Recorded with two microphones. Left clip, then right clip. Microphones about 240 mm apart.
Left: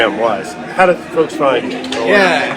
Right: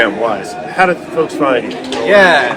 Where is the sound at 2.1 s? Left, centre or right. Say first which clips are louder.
Right 4 dB; centre.